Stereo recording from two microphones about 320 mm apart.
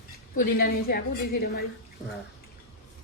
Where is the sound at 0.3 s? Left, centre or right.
Left.